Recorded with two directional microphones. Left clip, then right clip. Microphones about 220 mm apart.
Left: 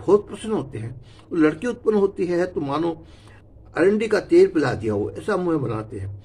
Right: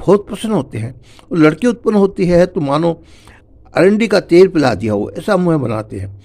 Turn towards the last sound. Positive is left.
turn(degrees=-40)  # may be behind; listen again after turning